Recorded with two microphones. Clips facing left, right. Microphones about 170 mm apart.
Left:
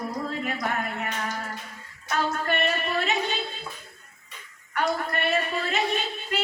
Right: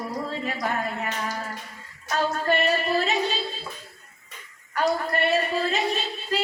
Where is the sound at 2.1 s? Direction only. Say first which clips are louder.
Right 3 dB; 35° right (ahead or behind).